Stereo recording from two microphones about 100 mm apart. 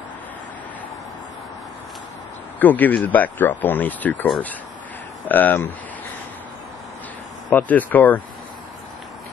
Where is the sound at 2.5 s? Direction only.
15° left (ahead or behind).